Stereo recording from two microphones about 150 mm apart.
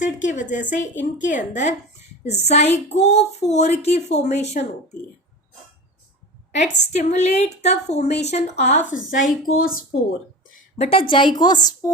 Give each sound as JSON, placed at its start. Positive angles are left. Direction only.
{"t": 0.0, "sound": "a woman's voice", "side_deg": 55}
{"t": 6.6, "sound": "a woman's voice", "side_deg": 50}
{"t": 8.9, "sound": "a woman's voice", "side_deg": 60}
{"t": 10.8, "sound": "a woman's voice", "side_deg": 40}